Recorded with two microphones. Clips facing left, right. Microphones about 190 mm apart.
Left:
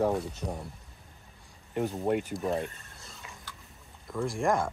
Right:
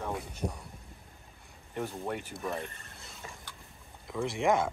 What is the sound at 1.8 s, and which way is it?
Speech, 45° left (ahead or behind).